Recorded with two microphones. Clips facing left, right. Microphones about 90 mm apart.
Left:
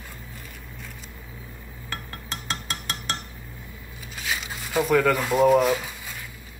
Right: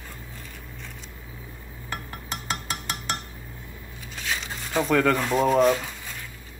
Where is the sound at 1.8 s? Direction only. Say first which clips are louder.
Right 1 dB; 5° right (ahead or behind).